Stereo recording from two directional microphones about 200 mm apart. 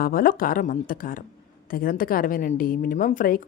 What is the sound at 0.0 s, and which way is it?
A woman's voice, 45° left (ahead or behind).